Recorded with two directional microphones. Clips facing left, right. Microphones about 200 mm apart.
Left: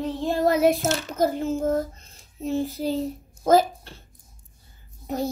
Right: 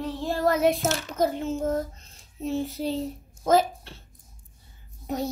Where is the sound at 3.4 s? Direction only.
Centre (ahead or behind).